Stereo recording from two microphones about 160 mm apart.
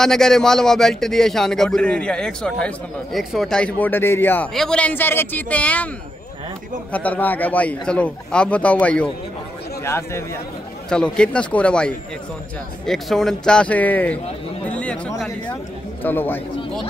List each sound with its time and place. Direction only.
0.0 s a man's voice: 5° left (ahead or behind)
6.9 s a man's voice: 10° left (ahead or behind)
10.9 s a man's voice: 5° left (ahead or behind)
14.7 s a sound: 10° left (ahead or behind)
15.1 s speech: centre (ahead or behind)
16.0 s a man's voice: 10° left (ahead or behind)